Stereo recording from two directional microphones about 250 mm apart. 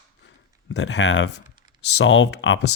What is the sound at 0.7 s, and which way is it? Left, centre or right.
Speech, left.